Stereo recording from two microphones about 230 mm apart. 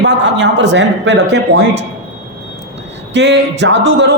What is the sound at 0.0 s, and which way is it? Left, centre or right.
A man's voice, right.